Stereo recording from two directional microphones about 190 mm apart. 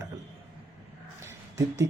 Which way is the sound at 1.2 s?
15° right (ahead or behind).